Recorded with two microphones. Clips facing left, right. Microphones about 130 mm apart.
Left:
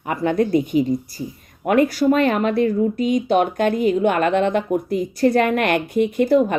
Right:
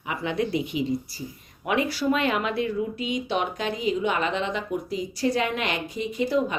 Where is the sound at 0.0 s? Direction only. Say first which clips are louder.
Left 8 dB; 50° left (ahead or behind).